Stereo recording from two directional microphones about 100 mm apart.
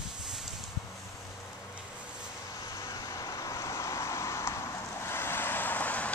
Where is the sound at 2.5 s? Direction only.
35° left (ahead or behind); by 6.1 s 15° left (ahead or behind).